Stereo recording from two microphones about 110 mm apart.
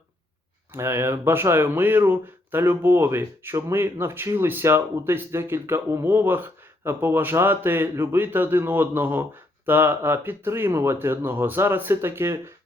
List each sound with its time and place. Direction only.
0.7 s speech: 25° right (ahead or behind)